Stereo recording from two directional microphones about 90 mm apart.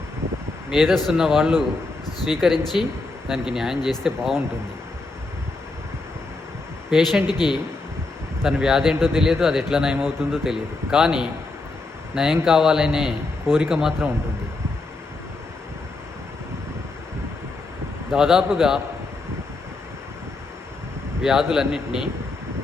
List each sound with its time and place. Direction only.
0.7 s a man's voice: centre (ahead or behind)
6.9 s a man's voice: centre (ahead or behind)
7.3 s a man's voice: 55° left (ahead or behind)
8.4 s a man's voice: 5° right (ahead or behind)
18.1 s a man's voice: 5° right (ahead or behind)
21.2 s a man's voice: 5° right (ahead or behind)